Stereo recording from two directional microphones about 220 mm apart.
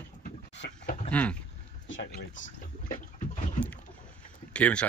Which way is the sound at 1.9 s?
60° left (ahead or behind).